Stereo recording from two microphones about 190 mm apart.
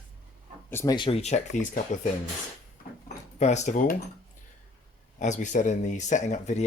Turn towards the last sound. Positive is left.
turn(degrees=35)  # may be behind; listen again after turning